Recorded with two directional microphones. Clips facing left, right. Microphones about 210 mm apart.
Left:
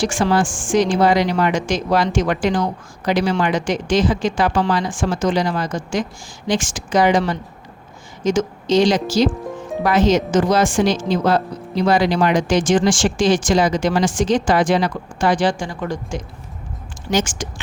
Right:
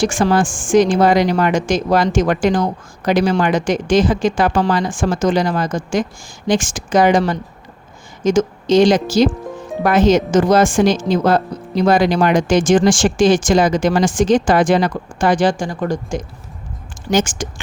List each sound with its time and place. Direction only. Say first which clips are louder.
0.0 s speech: right 3 dB; 45° right (ahead or behind)